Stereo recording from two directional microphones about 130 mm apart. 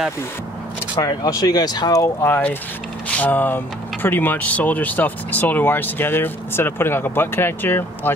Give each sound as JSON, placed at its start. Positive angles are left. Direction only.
{"t": 1.0, "sound": "speech", "side_deg": 30}
{"t": 2.2, "sound": "speech", "side_deg": 15}